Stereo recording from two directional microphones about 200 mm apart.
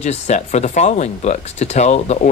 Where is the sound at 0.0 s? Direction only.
35° left (ahead or behind).